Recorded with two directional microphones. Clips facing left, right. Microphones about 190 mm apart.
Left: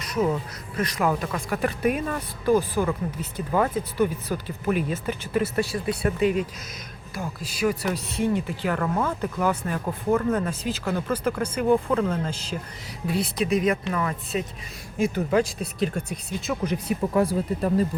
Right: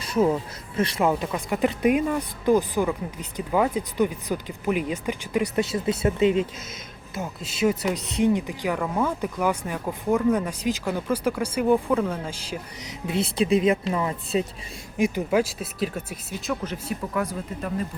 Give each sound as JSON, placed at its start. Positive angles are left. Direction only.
{"t": 0.0, "sound": "a sound", "side_deg": -30}
{"t": 0.8, "sound": "a woman's voice", "side_deg": -25}
{"t": 13.1, "sound": "a woman's voice", "side_deg": -25}
{"t": 17.2, "sound": "speech", "side_deg": 35}